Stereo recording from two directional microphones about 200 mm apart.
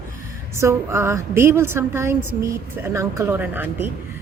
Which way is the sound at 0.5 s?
15° right (ahead or behind).